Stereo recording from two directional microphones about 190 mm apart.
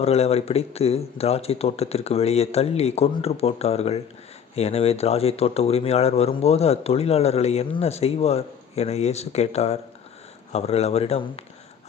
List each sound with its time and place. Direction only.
0.0 s speech: 35° left (ahead or behind)